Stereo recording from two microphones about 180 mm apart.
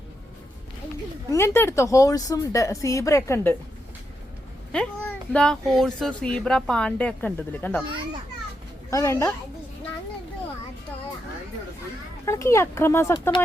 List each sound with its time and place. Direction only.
1.3 s speech: 15° left (ahead or behind)
4.7 s a child's voice: 5° left (ahead or behind)
8.9 s speech: 15° left (ahead or behind)
12.2 s speech: 15° left (ahead or behind)